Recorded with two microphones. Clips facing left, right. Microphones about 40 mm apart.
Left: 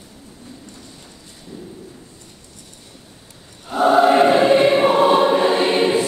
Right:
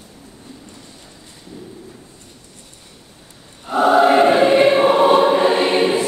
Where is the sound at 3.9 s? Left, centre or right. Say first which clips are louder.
Even; right.